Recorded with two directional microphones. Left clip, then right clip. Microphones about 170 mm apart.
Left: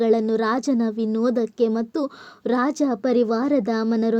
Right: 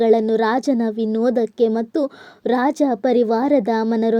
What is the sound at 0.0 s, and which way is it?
A woman's voice, 20° right (ahead or behind).